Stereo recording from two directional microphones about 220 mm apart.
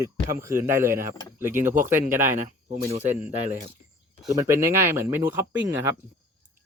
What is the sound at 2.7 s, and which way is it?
Speech, 30° right (ahead or behind).